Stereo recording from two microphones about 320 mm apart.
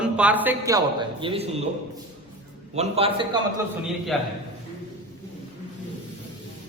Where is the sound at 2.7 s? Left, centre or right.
Centre.